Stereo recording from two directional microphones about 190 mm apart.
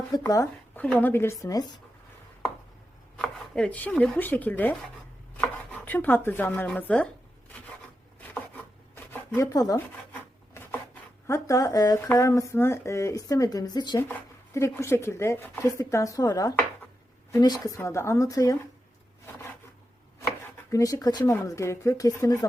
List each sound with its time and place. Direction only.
0.1 s speech: 20° left (ahead or behind)
3.2 s speech: 5° left (ahead or behind)
8.3 s chopping: 10° left (ahead or behind)
9.3 s speech: 20° left (ahead or behind)
20.7 s speech: 15° left (ahead or behind)